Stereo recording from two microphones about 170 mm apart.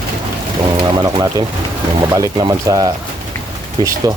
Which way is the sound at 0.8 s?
25° right (ahead or behind).